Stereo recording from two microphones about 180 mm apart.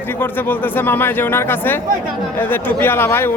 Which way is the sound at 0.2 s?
10° left (ahead or behind).